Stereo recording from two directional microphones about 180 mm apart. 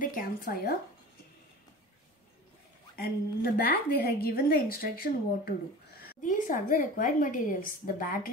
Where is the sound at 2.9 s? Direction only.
60° left (ahead or behind).